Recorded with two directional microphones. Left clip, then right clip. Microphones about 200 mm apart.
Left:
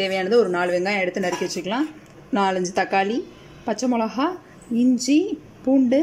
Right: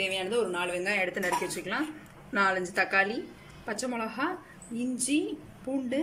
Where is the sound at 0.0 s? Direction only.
40° left (ahead or behind).